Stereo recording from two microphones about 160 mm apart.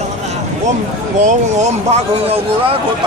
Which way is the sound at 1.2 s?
45° right (ahead or behind).